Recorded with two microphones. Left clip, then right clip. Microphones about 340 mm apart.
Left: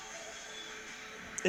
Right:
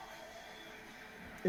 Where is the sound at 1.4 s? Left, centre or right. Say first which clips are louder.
Left 4 dB; left.